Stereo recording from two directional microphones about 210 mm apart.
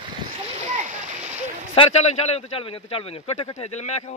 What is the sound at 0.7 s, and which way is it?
Splash, 35° right (ahead or behind).